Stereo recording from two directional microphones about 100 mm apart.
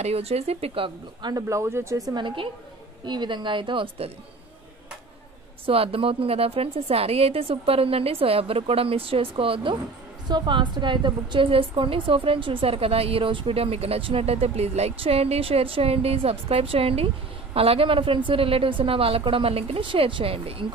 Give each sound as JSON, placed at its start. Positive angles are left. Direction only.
{"t": 0.0, "sound": "speech", "side_deg": -90}
{"t": 1.3, "sound": "speech", "side_deg": -30}
{"t": 3.1, "sound": "a woman's voice", "side_deg": -50}
{"t": 5.7, "sound": "a woman's voice", "side_deg": -70}
{"t": 10.2, "sound": "a woman's voice", "side_deg": -50}